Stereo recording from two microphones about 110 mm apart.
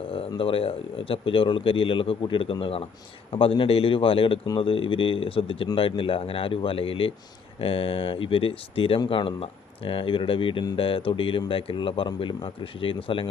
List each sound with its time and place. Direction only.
0.3 s speech: 55° left (ahead or behind)